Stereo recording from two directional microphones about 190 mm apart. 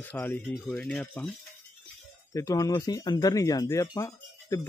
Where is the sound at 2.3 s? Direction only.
15° left (ahead or behind).